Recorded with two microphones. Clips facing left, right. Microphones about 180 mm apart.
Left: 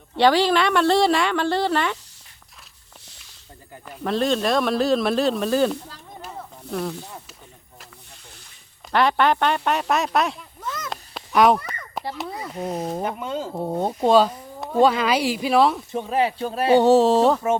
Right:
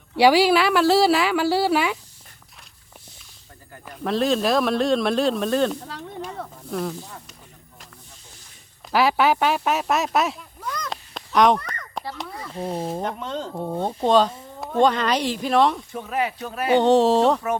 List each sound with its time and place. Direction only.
0.2 s speech: 10° right (ahead or behind)
3.8 s speech: centre (ahead or behind)
8.9 s speech: 5° right (ahead or behind)
11.3 s a sound: 5° left (ahead or behind)
12.1 s speech: 5° left (ahead or behind)
12.5 s speech: 30° right (ahead or behind)
12.9 s speech: 5° left (ahead or behind)
15.9 s speech: 25° left (ahead or behind)
16.7 s speech: 5° left (ahead or behind)